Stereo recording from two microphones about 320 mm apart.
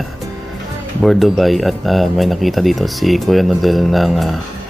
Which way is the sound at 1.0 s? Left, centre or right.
Centre.